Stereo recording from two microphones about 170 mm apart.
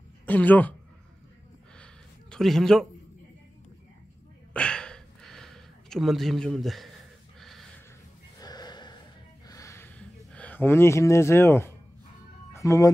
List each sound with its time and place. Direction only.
0.3 s speech: 10° left (ahead or behind)
2.3 s speech: 5° left (ahead or behind)
4.6 s a sound: 5° left (ahead or behind)
8.4 s sniff: 25° left (ahead or behind)
9.5 s a sound: 15° left (ahead or behind)
12.5 s speech: 20° left (ahead or behind)